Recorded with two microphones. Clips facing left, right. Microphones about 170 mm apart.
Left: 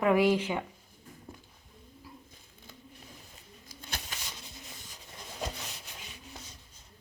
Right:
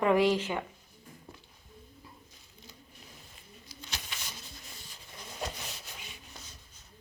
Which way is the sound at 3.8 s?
55° left (ahead or behind).